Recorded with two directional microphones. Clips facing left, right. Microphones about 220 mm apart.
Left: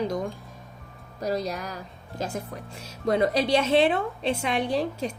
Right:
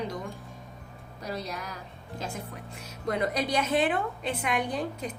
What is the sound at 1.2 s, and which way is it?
Speech, 40° left (ahead or behind).